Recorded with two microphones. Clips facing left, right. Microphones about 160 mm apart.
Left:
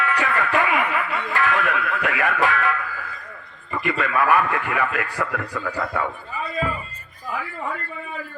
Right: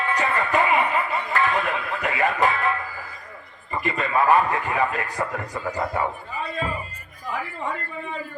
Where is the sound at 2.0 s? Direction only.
30° right (ahead or behind).